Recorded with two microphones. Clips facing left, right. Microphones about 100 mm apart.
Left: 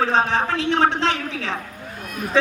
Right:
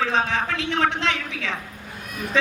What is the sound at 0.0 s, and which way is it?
A woman's voice, 35° left (ahead or behind).